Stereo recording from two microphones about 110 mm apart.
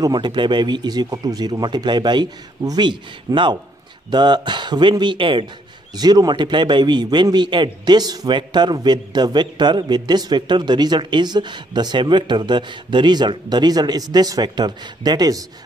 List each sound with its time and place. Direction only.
0.0 s a man's voice: 40° right (ahead or behind)
5.9 s a man's voice: 40° right (ahead or behind)